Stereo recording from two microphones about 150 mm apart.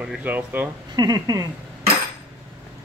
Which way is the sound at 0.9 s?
25° right (ahead or behind).